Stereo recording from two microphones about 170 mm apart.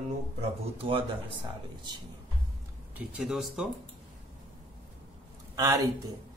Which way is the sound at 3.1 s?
5° right (ahead or behind).